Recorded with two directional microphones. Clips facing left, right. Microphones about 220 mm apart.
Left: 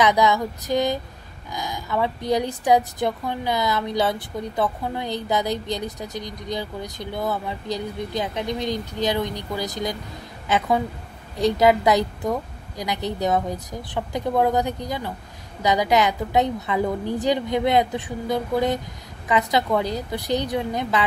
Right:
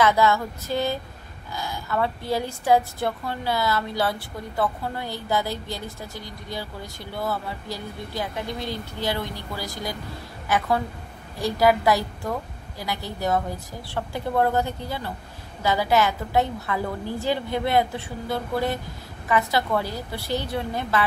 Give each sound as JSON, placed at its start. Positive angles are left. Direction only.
{"t": 0.0, "sound": "a woman's voice", "side_deg": 15}
{"t": 11.3, "sound": "a woman's voice", "side_deg": 20}